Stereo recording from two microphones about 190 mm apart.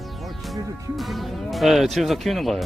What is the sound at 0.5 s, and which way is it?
Speech, centre (ahead or behind).